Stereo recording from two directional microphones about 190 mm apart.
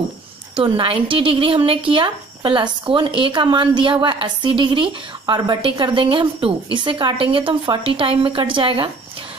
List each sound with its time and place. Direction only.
0.6 s speech: 30° right (ahead or behind)